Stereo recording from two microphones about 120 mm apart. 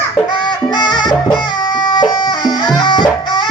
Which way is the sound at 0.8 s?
40° left (ahead or behind).